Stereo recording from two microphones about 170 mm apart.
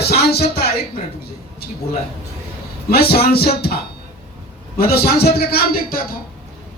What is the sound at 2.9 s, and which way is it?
Speech, 65° left (ahead or behind).